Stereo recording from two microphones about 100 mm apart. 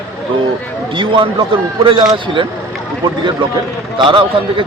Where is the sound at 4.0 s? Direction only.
55° right (ahead or behind).